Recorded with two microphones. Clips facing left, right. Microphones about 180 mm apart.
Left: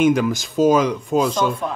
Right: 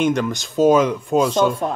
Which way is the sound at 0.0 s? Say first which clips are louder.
Left 3 dB; 5° left (ahead or behind).